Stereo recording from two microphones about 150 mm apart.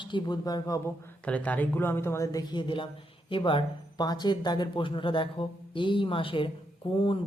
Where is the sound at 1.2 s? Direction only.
10° left (ahead or behind).